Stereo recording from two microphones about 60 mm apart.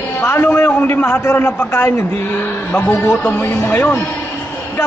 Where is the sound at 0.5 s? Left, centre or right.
Left.